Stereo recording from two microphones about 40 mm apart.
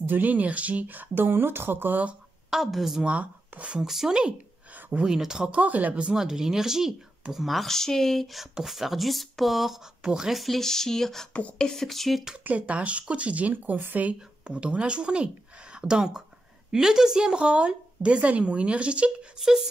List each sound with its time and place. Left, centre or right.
0.0 s speech: right
2.5 s speech: centre
3.0 s speech: right
3.8 s speech: centre
5.5 s speech: right
6.1 s speech: centre
7.7 s speech: centre
10.0 s speech: centre
10.3 s speech: centre
11.8 s speech: centre
12.4 s speech: right
14.4 s a woman's voice: right
19.3 s speech: centre